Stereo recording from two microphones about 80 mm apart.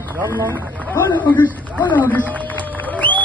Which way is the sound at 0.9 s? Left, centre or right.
Left.